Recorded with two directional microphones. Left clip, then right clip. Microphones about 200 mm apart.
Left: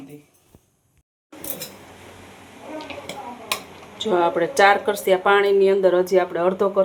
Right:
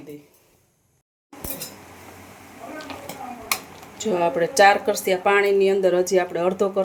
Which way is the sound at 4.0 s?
15° right (ahead or behind).